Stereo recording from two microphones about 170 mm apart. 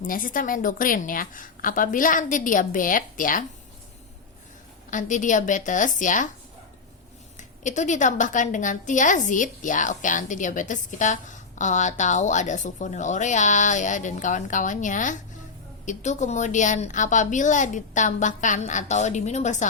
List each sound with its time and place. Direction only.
0.0 s a woman's voice: 55° left (ahead or behind)
4.9 s a woman's voice: 50° left (ahead or behind)
7.3 s a woman's voice: 45° left (ahead or behind)